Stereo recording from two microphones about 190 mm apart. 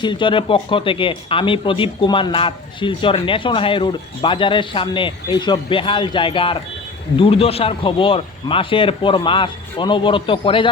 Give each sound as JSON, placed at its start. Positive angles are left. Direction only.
{"t": 0.0, "sound": "speech", "side_deg": 25}